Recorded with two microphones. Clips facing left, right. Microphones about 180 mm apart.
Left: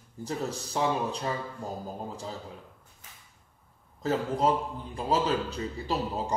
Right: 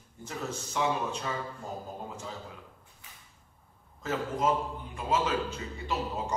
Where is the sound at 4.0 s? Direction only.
35° left (ahead or behind).